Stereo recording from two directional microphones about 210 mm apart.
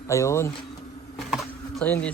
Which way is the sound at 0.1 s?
15° left (ahead or behind).